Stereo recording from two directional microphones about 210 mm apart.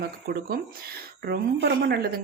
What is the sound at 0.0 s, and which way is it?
Speech, 45° right (ahead or behind).